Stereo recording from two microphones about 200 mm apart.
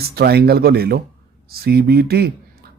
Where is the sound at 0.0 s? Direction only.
50° right (ahead or behind).